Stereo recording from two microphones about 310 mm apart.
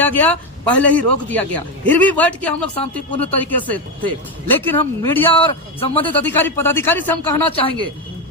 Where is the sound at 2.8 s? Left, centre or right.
Centre.